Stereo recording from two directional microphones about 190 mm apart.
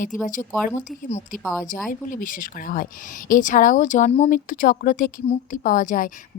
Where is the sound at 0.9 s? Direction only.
40° left (ahead or behind).